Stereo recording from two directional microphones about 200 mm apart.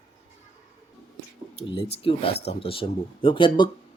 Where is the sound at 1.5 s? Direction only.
30° left (ahead or behind).